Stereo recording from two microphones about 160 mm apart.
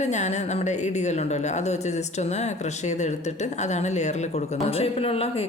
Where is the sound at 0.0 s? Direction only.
45° left (ahead or behind).